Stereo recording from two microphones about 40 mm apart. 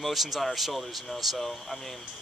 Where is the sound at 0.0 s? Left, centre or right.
Centre.